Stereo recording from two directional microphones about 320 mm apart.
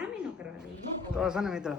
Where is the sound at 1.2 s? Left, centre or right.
Centre.